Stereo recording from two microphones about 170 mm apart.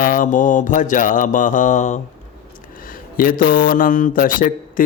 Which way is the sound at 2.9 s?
55° left (ahead or behind).